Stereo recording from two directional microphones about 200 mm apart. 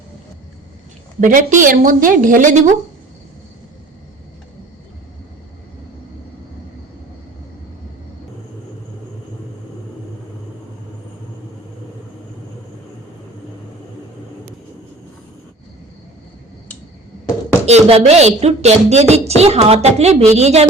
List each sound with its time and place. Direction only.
1.2 s speech: 40° right (ahead or behind)
17.7 s speech: 30° right (ahead or behind)